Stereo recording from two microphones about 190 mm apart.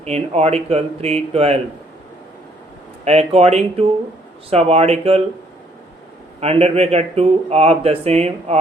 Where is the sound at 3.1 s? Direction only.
35° right (ahead or behind).